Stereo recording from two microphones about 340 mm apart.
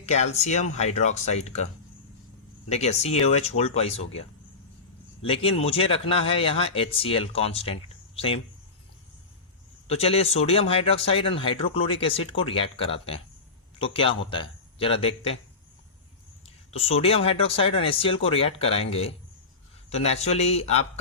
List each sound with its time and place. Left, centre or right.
0.0 s speech: centre
2.6 s speech: centre
5.2 s speech: centre
9.8 s speech: centre
16.7 s speech: centre